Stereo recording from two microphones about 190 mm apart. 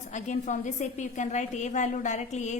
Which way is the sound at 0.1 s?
40° left (ahead or behind).